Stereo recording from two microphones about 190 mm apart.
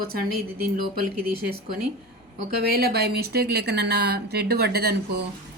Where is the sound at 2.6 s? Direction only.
50° right (ahead or behind).